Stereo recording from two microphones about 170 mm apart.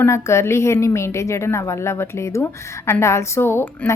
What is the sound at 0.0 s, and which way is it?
A woman's voice, 15° left (ahead or behind).